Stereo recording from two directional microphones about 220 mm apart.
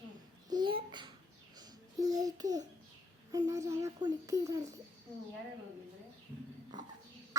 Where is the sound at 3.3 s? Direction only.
15° right (ahead or behind).